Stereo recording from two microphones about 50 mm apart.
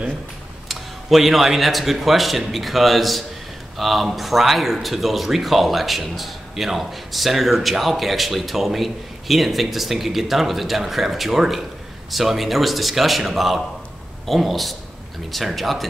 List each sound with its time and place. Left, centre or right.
0.7 s speech: centre